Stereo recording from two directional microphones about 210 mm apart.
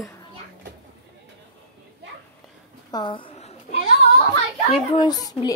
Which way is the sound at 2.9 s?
20° left (ahead or behind).